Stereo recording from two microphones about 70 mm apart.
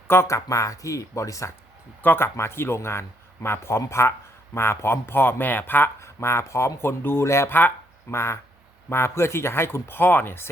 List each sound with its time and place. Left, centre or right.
0.1 s speech: left
2.0 s speech: left
2.2 s speech: left